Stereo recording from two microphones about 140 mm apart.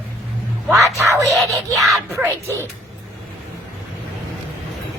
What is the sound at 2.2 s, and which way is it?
Speech, 15° right (ahead or behind).